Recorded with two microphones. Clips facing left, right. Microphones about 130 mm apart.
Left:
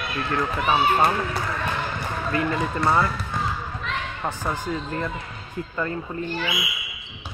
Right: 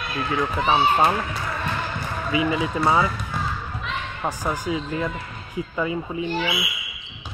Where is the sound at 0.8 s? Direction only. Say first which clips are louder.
Right 1 dB; 15° right (ahead or behind).